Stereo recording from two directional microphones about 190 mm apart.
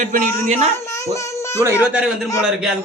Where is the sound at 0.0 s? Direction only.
40° right (ahead or behind).